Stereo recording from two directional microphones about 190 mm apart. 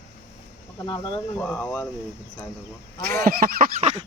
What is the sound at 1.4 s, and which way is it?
Speech, 10° left (ahead or behind).